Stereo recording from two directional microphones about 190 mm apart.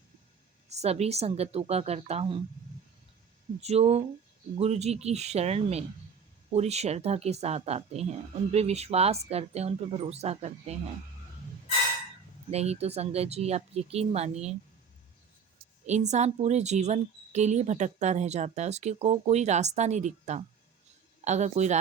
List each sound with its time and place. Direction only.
0.7 s a woman's voice: 35° right (ahead or behind)
3.6 s a woman's voice: 35° right (ahead or behind)
12.5 s a woman's voice: 35° right (ahead or behind)
15.9 s a woman's voice: 35° right (ahead or behind)